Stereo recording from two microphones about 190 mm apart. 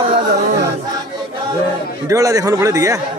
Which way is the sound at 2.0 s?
15° right (ahead or behind).